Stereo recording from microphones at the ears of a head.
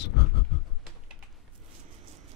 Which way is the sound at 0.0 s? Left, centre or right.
Left.